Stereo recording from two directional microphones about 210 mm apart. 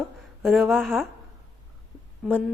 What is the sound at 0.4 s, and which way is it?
Speech, centre (ahead or behind).